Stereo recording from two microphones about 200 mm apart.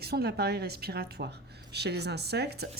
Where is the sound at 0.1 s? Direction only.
55° right (ahead or behind).